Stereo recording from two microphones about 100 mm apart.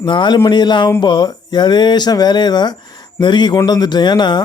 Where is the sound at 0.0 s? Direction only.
50° left (ahead or behind).